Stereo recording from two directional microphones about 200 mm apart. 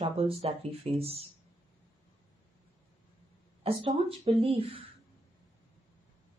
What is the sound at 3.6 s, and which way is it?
Speech, 30° right (ahead or behind).